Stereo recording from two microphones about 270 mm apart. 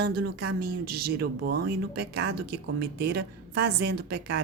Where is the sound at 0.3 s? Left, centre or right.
Right.